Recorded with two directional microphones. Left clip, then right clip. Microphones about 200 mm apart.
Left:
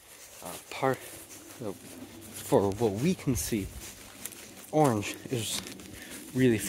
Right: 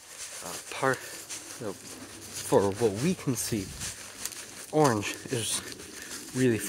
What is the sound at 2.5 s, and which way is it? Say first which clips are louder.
Speech: right 1 dB; 20° left (ahead or behind).